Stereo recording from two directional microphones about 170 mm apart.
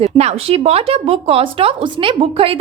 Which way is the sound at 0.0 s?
40° right (ahead or behind).